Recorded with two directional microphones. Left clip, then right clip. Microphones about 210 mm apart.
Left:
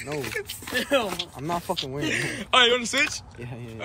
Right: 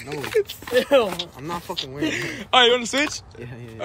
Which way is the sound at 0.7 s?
45° right (ahead or behind).